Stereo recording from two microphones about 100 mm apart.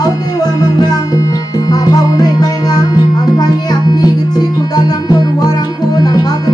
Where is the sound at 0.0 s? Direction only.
40° left (ahead or behind).